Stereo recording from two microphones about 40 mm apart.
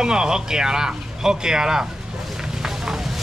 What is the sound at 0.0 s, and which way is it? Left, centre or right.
Speech, centre.